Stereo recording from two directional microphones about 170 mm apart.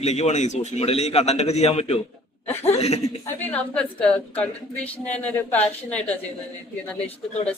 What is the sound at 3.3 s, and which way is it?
Speech, 10° left (ahead or behind).